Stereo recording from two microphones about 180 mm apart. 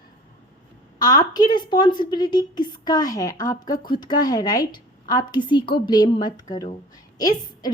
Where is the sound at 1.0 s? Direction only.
20° left (ahead or behind).